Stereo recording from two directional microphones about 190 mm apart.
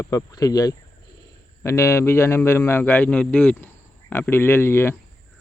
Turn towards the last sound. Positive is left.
turn(degrees=10)  # may be behind; listen again after turning